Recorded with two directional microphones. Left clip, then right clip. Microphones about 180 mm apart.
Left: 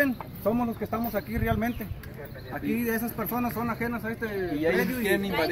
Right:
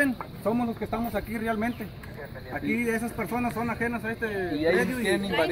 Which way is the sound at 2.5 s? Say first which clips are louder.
Right 1 dB; 5° right (ahead or behind).